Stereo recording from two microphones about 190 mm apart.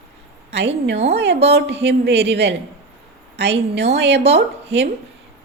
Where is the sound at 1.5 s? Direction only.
65° right (ahead or behind).